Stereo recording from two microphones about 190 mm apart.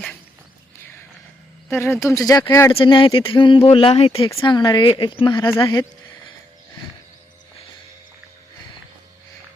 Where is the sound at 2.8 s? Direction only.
25° left (ahead or behind).